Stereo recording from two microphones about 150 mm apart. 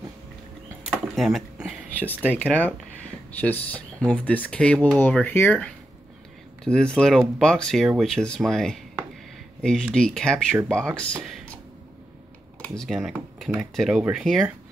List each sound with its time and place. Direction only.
1.1 s a sound: centre (ahead or behind)
2.3 s speech: 10° left (ahead or behind)
12.6 s speech: centre (ahead or behind)